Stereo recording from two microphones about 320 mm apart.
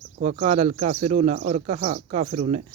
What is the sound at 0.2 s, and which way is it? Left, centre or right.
Speech, right.